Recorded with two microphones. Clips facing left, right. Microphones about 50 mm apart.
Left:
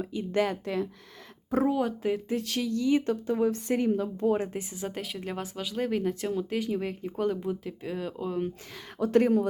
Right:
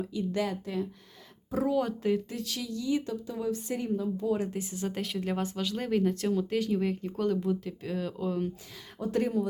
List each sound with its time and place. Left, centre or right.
0.0 s a woman's voice: left
1.7 s speech: centre
2.3 s a woman's voice: left
4.4 s speech: left
4.8 s speech: centre
9.0 s speech: left